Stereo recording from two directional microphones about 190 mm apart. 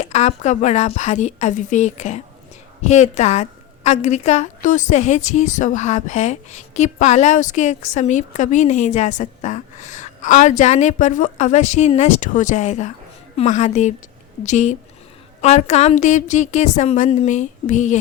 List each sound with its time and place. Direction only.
0.0 s a woman's voice: 35° left (ahead or behind)